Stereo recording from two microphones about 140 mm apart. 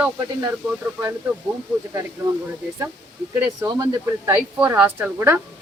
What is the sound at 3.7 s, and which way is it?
Speech, 20° right (ahead or behind).